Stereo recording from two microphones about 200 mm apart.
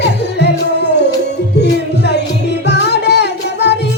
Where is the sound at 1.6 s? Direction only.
55° left (ahead or behind).